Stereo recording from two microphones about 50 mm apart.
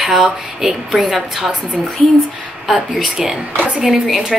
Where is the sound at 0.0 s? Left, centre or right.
Centre.